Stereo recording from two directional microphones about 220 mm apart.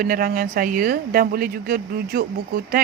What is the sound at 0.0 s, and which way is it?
Speech, 40° right (ahead or behind).